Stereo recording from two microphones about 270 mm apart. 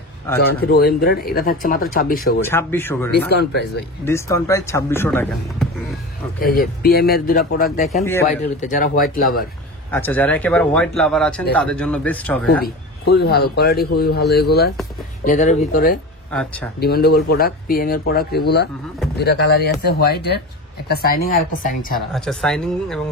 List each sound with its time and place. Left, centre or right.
0.4 s a man's voice: left
2.4 s speech: centre
3.3 s a man's voice: left
4.0 s speech: centre
6.4 s a man's voice: left
9.8 s speech: centre
12.6 s a man's voice: left
16.3 s speech: centre
16.8 s a man's voice: left
22.1 s speech: centre